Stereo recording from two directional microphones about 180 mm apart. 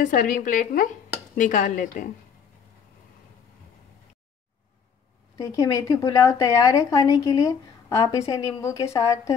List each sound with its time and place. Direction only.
0.0 s speech: 45° left (ahead or behind)
5.3 s a woman's voice: 20° left (ahead or behind)